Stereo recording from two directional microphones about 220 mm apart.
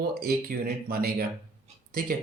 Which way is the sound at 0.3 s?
45° right (ahead or behind).